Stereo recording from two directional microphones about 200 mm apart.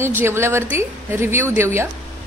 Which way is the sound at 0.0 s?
10° right (ahead or behind).